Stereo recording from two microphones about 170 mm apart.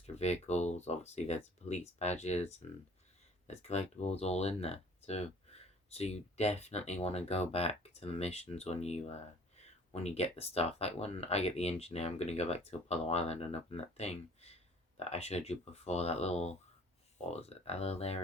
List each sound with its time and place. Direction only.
0.0 s speech: 40° left (ahead or behind)